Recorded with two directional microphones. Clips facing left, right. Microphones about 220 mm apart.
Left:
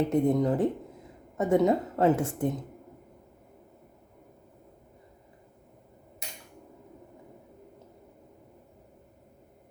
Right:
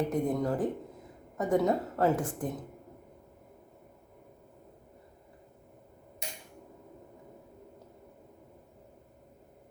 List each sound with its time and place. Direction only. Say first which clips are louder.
0.1 s a woman's voice: left 5 dB; 25° left (ahead or behind)